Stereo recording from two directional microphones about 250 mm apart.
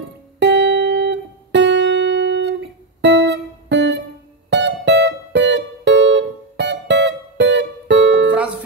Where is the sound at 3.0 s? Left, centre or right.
Right.